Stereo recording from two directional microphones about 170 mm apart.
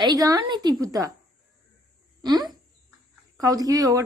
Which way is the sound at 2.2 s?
25° right (ahead or behind).